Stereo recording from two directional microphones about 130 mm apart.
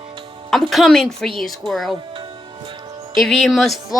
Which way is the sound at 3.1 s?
Centre (ahead or behind).